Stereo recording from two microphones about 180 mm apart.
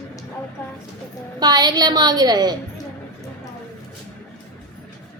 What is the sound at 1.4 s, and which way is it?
A woman's voice, 20° right (ahead or behind).